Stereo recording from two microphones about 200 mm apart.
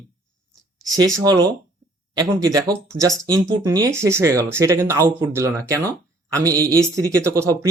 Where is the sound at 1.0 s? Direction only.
20° right (ahead or behind).